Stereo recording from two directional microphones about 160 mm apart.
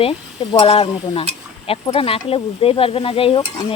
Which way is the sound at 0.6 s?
35° left (ahead or behind).